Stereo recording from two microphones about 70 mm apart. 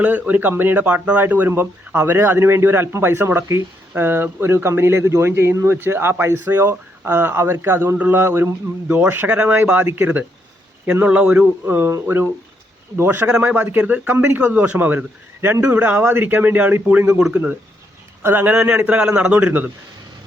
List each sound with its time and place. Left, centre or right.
0.0 s a man's voice: right
11.6 s speech: right
13.4 s a man's voice: right
18.2 s speech: right
18.5 s a man's voice: centre